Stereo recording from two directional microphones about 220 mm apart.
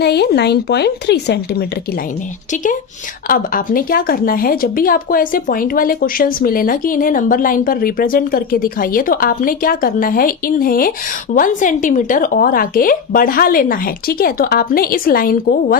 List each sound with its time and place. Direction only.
0.0 s speech: 50° left (ahead or behind)
3.2 s speech: 40° left (ahead or behind)